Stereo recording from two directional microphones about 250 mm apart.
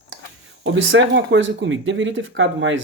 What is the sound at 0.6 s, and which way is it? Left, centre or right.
Speech, right.